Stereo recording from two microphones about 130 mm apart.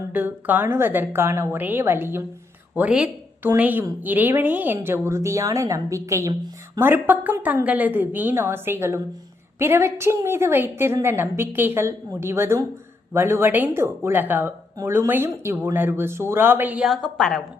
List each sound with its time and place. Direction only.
0.1 s a woman's voice: 15° right (ahead or behind)
16.9 s a woman's voice: 5° left (ahead or behind)